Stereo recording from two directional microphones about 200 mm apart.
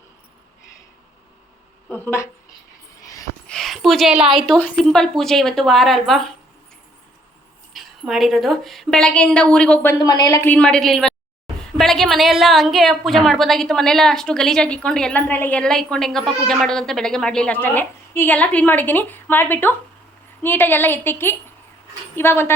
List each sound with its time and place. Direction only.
1.9 s a woman's voice: 10° left (ahead or behind)
3.0 s a sound: 15° left (ahead or behind)
3.4 s a woman's voice: 5° left (ahead or behind)
7.7 s a woman's voice: centre (ahead or behind)
10.0 s a woman's voice: 20° left (ahead or behind)